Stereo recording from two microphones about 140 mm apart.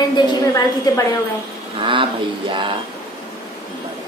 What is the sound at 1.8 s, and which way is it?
Speech, 35° right (ahead or behind).